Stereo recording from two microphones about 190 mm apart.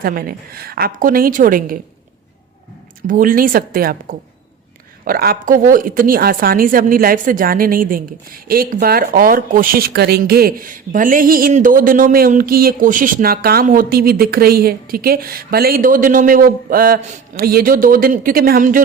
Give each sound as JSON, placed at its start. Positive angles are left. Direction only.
{"t": 0.0, "sound": "speech", "side_deg": -50}
{"t": 3.1, "sound": "speech", "side_deg": -45}